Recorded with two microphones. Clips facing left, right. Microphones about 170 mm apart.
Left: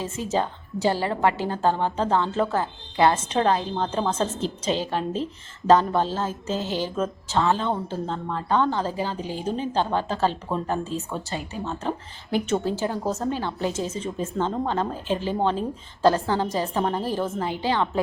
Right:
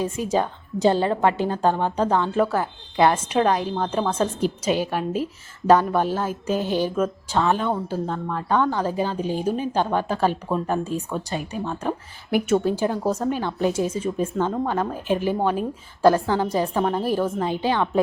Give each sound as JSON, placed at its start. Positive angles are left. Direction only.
{"t": 0.0, "sound": "speech", "side_deg": -15}